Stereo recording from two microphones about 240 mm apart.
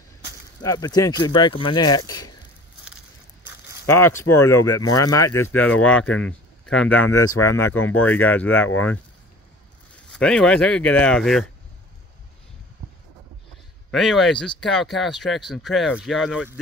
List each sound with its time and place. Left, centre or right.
0.6 s speech: centre
2.0 s a sound: centre
3.8 s speech: centre
10.1 s speech: centre
13.8 s speech: centre